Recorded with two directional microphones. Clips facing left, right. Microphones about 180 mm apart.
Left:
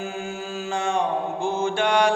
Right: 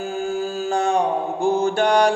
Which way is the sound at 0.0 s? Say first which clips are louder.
Right 7 dB; 35° right (ahead or behind).